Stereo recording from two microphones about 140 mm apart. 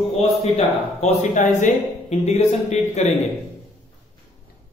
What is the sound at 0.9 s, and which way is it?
A man's voice, 55° left (ahead or behind).